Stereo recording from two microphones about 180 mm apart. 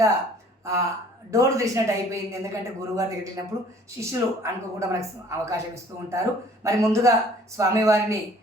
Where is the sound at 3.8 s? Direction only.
15° right (ahead or behind).